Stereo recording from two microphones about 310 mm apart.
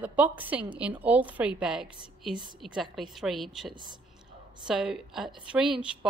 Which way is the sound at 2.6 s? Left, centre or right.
Centre.